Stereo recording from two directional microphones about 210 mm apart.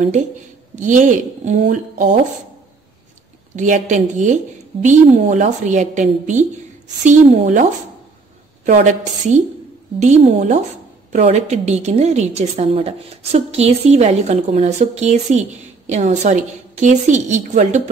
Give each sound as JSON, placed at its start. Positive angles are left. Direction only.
{"t": 0.7, "sound": "a woman's voice", "side_deg": -35}
{"t": 3.5, "sound": "a woman's voice", "side_deg": -35}
{"t": 8.6, "sound": "a woman's voice", "side_deg": -35}